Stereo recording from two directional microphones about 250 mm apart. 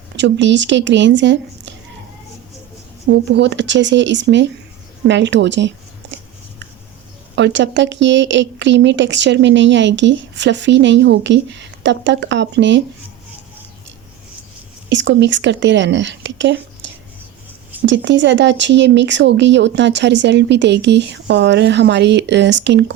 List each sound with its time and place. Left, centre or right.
0.2 s speech: right
3.2 s speech: right
7.3 s speech: right
14.8 s speech: right